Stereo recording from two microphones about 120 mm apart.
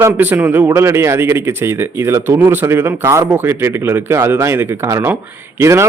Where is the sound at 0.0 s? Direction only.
15° right (ahead or behind).